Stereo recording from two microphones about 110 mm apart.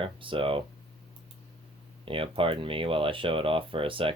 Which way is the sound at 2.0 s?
55° right (ahead or behind).